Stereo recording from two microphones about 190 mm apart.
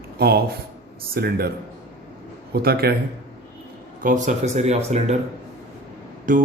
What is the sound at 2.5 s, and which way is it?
Speech, 55° right (ahead or behind).